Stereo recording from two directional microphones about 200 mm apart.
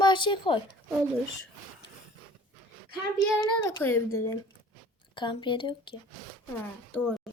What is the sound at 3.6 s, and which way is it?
A woman's voice, 15° left (ahead or behind).